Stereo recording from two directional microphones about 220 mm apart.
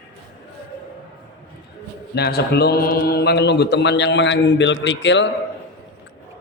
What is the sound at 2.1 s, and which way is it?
A man's voice, 50° left (ahead or behind).